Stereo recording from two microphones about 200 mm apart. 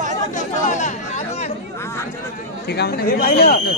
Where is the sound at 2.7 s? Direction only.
50° left (ahead or behind).